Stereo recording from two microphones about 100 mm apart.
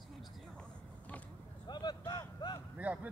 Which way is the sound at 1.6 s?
45° left (ahead or behind).